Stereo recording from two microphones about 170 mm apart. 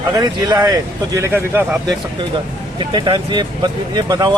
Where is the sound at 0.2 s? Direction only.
20° right (ahead or behind).